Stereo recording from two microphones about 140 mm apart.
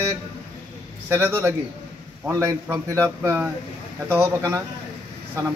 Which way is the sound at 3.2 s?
10° right (ahead or behind).